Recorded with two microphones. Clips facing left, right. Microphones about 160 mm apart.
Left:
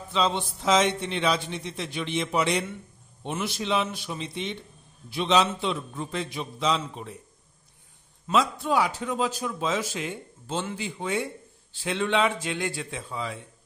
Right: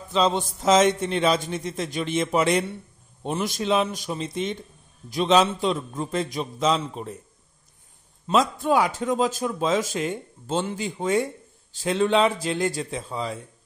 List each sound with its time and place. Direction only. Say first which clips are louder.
0.1 s a man's voice: right 4 dB; 40° right (ahead or behind)
8.3 s a man's voice: right 3 dB; 50° right (ahead or behind)